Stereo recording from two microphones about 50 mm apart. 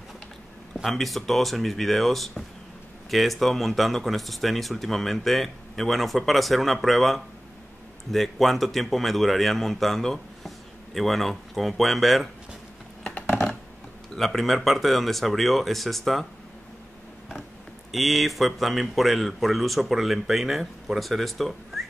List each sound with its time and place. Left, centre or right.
0.8 s speech: centre
13.0 s computer keyboard: left
14.1 s speech: centre
17.9 s speech: centre